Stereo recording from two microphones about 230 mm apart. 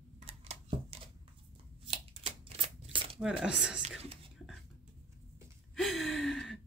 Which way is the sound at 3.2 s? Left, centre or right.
Centre.